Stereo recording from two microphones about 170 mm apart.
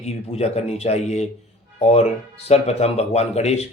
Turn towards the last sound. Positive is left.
turn(degrees=40)  # may be behind; listen again after turning